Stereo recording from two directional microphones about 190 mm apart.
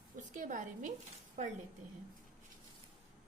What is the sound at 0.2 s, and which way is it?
Speech, 40° right (ahead or behind).